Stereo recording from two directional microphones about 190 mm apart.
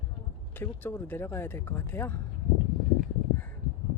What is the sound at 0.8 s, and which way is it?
Speech, 10° left (ahead or behind).